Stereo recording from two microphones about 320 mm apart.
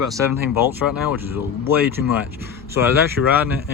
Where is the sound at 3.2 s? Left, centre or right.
Left.